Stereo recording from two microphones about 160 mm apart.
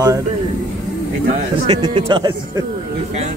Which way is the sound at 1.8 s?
25° right (ahead or behind).